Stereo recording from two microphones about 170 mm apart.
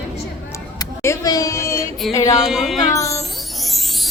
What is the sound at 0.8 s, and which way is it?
Speech, 20° left (ahead or behind).